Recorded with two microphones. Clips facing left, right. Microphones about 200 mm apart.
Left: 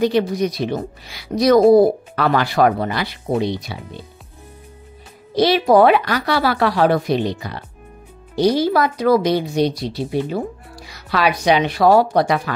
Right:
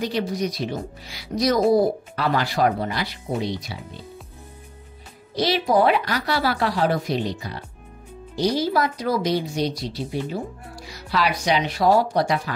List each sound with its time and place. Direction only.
0.0 s speech: 60° left (ahead or behind)
5.3 s speech: 65° left (ahead or behind)